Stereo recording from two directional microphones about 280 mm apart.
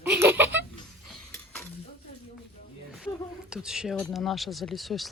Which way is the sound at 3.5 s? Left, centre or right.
Centre.